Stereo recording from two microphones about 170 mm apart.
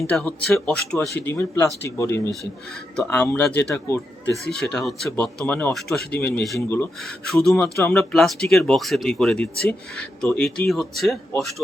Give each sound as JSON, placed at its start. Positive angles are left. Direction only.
{"t": 0.0, "sound": "speech", "side_deg": 5}
{"t": 4.5, "sound": "speech", "side_deg": 5}
{"t": 6.4, "sound": "speech", "side_deg": 0}
{"t": 7.5, "sound": "speech", "side_deg": 15}
{"t": 7.9, "sound": "speech", "side_deg": 0}